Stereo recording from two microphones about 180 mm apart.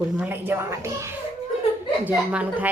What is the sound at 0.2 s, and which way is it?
A woman's voice, 10° right (ahead or behind).